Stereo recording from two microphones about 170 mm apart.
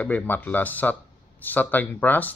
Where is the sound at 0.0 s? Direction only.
10° left (ahead or behind).